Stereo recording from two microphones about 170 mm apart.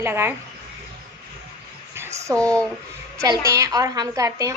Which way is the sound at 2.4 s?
5° left (ahead or behind).